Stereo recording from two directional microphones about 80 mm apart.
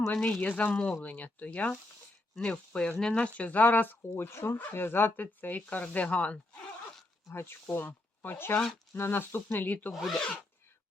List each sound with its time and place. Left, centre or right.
0.1 s speech: centre
7.3 s speech: left
9.9 s speech: centre